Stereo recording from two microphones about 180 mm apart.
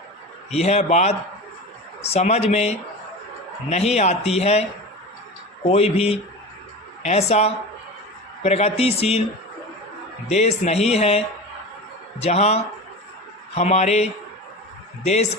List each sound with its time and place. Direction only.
0.5 s a man's voice: 35° left (ahead or behind)
5.6 s a man's voice: 35° left (ahead or behind)
10.2 s a man's voice: 35° left (ahead or behind)
12.2 s a man's voice: 35° left (ahead or behind)